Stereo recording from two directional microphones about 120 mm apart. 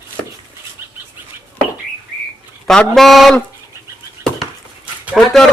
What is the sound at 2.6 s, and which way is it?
Speech, 5° left (ahead or behind).